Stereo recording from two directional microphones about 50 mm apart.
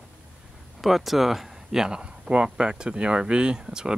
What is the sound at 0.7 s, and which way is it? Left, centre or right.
Speech, centre.